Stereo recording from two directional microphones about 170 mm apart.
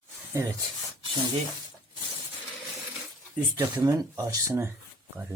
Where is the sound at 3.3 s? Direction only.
10° right (ahead or behind).